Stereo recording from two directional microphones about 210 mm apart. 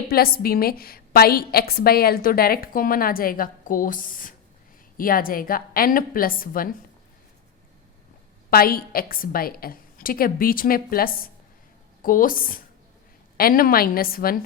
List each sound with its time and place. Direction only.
0.1 s a woman's voice: 45° left (ahead or behind)
8.4 s a woman's voice: 45° left (ahead or behind)